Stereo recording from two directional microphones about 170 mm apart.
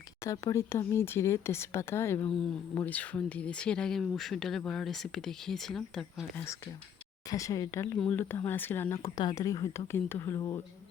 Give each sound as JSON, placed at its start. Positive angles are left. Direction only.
{"t": 0.3, "sound": "speech", "side_deg": 15}
{"t": 7.3, "sound": "speech", "side_deg": 20}